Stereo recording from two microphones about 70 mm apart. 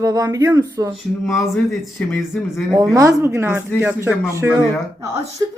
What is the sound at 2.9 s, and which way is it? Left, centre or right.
Speech, right.